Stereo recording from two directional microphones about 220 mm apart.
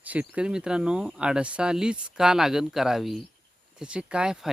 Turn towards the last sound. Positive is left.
turn(degrees=-5)  # may be behind; listen again after turning